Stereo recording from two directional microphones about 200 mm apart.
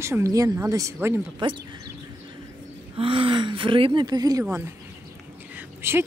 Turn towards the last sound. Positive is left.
turn(degrees=-10)  # may be behind; listen again after turning